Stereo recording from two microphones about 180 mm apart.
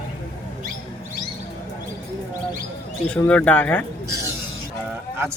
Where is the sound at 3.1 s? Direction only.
5° left (ahead or behind).